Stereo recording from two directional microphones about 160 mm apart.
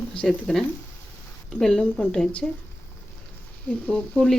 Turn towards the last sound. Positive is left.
turn(degrees=5)  # may be behind; listen again after turning